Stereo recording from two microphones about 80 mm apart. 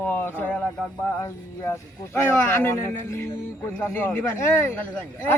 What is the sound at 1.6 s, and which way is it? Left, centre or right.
Speech, left.